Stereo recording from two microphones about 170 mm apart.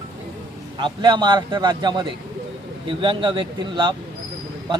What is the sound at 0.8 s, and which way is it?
A man's voice, 25° right (ahead or behind).